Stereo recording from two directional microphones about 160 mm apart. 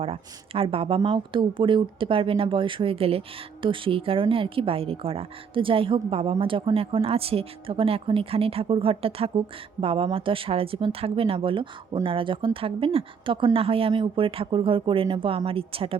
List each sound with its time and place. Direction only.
0.0 s speech: 35° right (ahead or behind)